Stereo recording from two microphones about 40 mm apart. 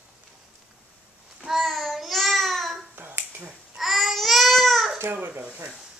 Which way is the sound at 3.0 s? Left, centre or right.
Right.